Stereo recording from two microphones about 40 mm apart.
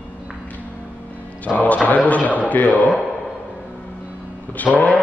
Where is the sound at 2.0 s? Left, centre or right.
Left.